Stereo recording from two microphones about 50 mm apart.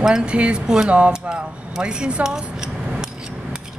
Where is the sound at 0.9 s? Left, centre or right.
Centre.